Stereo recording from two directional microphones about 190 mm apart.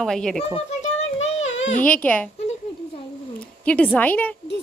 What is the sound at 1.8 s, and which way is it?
Speech, 5° left (ahead or behind).